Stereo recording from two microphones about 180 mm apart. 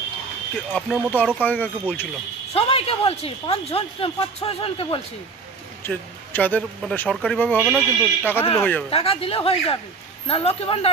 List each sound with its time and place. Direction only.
0.7 s speech: 10° left (ahead or behind)
2.5 s speech: 35° left (ahead or behind)
5.9 s speech: 10° left (ahead or behind)
8.9 s speech: 30° left (ahead or behind)